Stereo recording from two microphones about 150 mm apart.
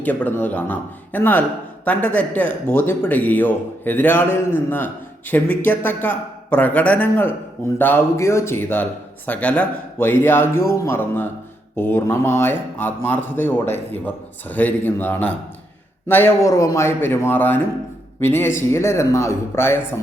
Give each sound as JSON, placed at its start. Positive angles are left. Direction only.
{"t": 0.0, "sound": "speech", "side_deg": 10}